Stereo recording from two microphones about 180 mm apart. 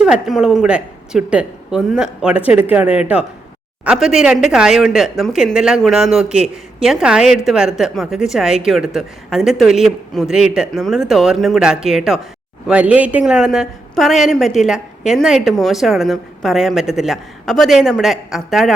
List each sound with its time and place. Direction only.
0.0 s speech: 5° right (ahead or behind)